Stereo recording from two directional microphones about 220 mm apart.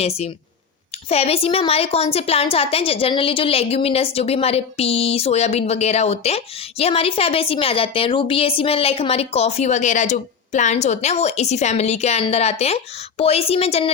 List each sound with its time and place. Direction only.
1.1 s a woman's voice: 25° left (ahead or behind)